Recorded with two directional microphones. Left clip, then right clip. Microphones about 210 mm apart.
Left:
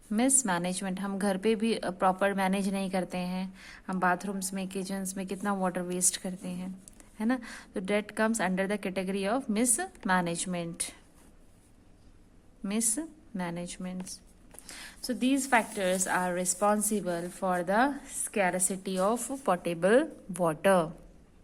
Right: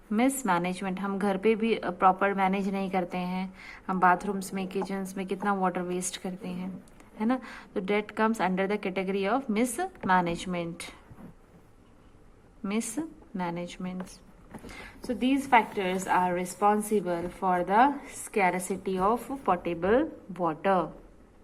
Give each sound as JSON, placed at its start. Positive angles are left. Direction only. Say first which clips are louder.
{"t": 0.1, "sound": "a woman's voice", "louder": "right 2 dB", "side_deg": 10}
{"t": 12.6, "sound": "a woman's voice", "louder": "right 1 dB", "side_deg": 10}